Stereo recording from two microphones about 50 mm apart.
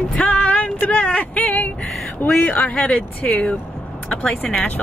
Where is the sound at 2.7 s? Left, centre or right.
Left.